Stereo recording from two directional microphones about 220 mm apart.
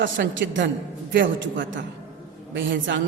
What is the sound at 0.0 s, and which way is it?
A man's voice, 55° right (ahead or behind).